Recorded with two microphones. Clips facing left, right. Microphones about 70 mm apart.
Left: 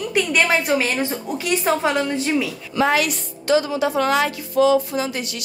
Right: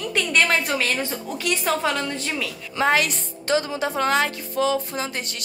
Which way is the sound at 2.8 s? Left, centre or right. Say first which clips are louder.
Left 2 dB; right.